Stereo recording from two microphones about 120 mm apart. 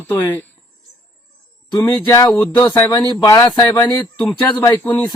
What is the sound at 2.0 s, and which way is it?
Speech, 30° left (ahead or behind).